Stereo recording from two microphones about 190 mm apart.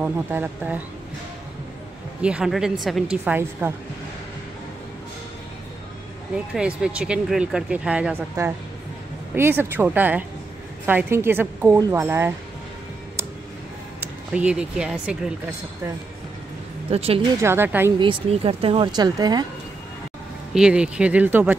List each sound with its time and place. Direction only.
0.0 s a woman's voice: 10° right (ahead or behind)
2.2 s speech: 5° right (ahead or behind)
6.3 s a woman's voice: 5° right (ahead or behind)
14.3 s speech: 5° right (ahead or behind)
16.9 s speech: 30° right (ahead or behind)
17.4 s a woman's voice: 10° right (ahead or behind)
17.9 s speech: 30° right (ahead or behind)
20.5 s a woman's voice: 5° right (ahead or behind)